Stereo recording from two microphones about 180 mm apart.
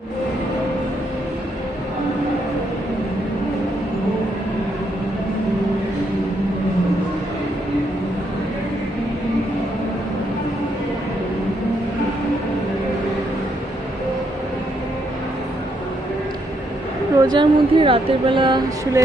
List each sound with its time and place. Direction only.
17.2 s speech: 25° right (ahead or behind)